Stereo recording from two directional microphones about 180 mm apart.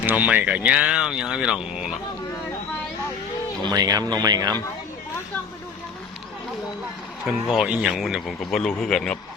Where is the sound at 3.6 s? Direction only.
20° right (ahead or behind).